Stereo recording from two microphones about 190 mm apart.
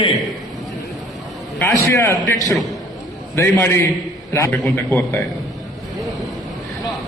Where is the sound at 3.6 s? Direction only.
10° left (ahead or behind).